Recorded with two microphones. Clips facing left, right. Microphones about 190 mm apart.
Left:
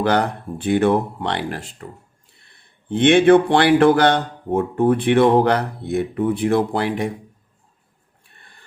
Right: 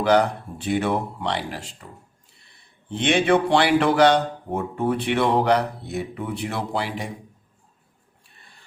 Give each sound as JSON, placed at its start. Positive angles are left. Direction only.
{"t": 0.0, "sound": "speech", "side_deg": 60}
{"t": 8.4, "sound": "printer", "side_deg": 55}